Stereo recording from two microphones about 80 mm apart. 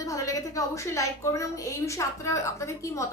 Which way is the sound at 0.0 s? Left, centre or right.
Left.